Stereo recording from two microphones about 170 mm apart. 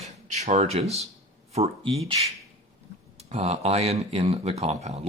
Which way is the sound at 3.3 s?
35° right (ahead or behind).